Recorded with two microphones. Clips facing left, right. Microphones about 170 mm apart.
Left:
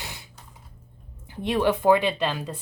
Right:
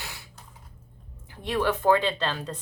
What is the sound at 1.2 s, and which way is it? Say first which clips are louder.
Speech: left 3 dB; 20° left (ahead or behind).